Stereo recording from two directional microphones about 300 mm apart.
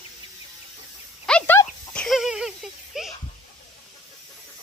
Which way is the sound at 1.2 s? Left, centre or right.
Centre.